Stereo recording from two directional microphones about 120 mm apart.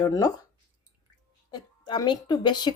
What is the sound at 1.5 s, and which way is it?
Speech, 35° left (ahead or behind).